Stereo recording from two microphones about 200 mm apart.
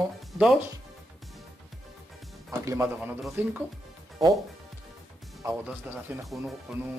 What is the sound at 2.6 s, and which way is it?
Speech, 15° right (ahead or behind).